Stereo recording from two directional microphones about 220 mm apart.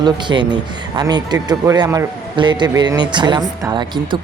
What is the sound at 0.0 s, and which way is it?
Speech, 20° right (ahead or behind).